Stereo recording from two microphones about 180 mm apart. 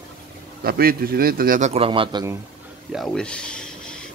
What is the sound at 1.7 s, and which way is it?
Speech, 30° right (ahead or behind).